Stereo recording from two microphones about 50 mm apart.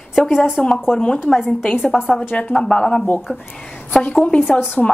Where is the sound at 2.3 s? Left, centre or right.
Left.